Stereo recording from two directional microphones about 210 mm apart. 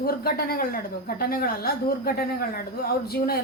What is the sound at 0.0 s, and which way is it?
A woman's voice, 45° left (ahead or behind).